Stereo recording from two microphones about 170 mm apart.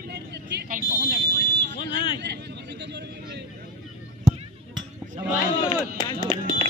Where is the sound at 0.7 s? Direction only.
50° right (ahead or behind).